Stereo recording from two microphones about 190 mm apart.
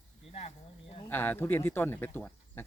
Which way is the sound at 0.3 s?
30° left (ahead or behind).